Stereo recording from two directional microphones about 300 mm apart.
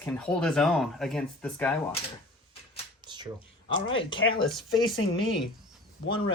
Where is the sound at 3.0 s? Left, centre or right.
Centre.